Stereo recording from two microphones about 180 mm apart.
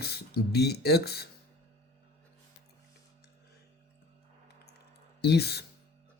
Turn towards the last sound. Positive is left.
turn(degrees=65)  # may be behind; listen again after turning